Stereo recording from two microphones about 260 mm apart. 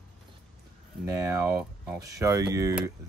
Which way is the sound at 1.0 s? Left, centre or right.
Centre.